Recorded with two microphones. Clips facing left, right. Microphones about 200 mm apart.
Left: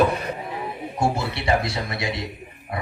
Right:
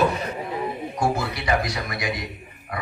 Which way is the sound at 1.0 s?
25° left (ahead or behind).